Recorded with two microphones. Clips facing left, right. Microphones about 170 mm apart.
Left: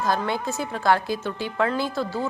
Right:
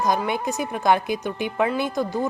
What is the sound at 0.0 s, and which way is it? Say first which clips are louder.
A woman's voice: right 2 dB; 15° right (ahead or behind).